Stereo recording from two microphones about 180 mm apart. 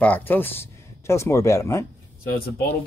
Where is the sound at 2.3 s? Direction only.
60° left (ahead or behind).